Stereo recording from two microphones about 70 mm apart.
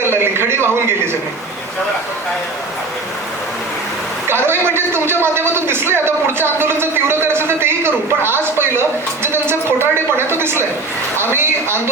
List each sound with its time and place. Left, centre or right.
0.1 s a man's voice: right
4.3 s a man's voice: right